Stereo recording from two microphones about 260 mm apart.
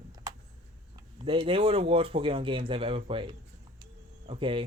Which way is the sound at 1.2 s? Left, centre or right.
Centre.